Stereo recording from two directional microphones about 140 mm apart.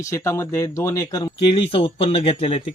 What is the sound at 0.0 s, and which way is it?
Speech, 20° left (ahead or behind).